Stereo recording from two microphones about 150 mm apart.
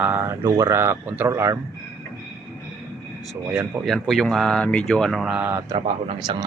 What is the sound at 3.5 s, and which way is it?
Speech, 5° right (ahead or behind).